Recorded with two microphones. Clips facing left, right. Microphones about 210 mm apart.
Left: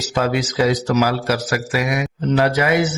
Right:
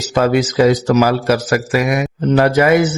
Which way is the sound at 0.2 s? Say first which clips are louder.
Right 6 dB; 50° right (ahead or behind).